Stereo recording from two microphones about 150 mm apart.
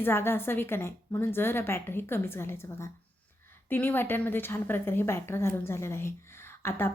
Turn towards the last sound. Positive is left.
turn(degrees=15)  # may be behind; listen again after turning